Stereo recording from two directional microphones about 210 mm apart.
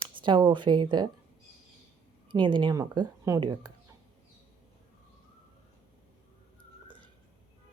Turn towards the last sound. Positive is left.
turn(degrees=-25)  # may be behind; listen again after turning